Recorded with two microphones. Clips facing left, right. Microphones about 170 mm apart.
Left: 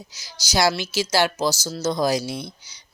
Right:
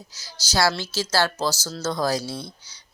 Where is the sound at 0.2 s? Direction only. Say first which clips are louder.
Left 1 dB; 15° left (ahead or behind).